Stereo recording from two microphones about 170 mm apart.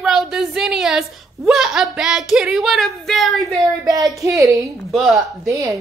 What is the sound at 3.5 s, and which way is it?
Speech, 20° right (ahead or behind).